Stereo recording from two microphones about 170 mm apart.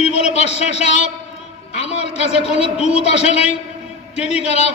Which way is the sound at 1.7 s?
40° left (ahead or behind).